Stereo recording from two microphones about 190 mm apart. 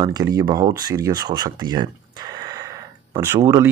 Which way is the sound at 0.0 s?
20° right (ahead or behind).